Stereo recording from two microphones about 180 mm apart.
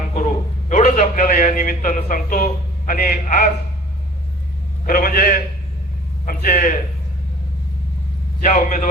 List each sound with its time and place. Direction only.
0.7 s a man's voice: 45° left (ahead or behind)
4.9 s a man's voice: 50° left (ahead or behind)
8.4 s a man's voice: 45° left (ahead or behind)